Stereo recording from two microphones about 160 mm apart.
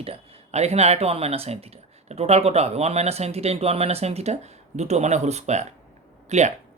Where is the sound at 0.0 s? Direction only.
40° right (ahead or behind).